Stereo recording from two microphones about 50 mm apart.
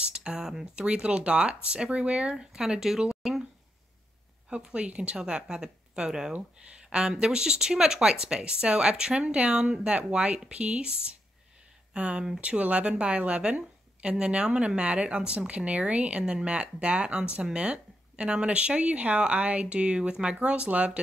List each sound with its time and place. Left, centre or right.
0.0 s speech: centre
2.3 s speech: centre
4.5 s speech: right
11.9 s speech: right